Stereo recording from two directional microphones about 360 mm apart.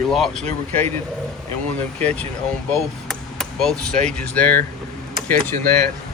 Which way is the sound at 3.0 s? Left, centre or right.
Centre.